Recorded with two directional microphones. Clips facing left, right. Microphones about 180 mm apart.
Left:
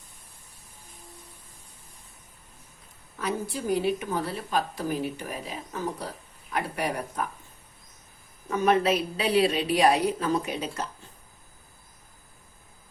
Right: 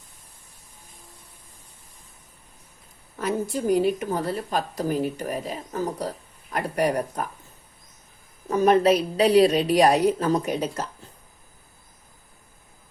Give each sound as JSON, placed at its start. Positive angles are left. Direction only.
{"t": 3.2, "sound": "a woman's voice", "side_deg": -45}
{"t": 8.4, "sound": "a woman's voice", "side_deg": -40}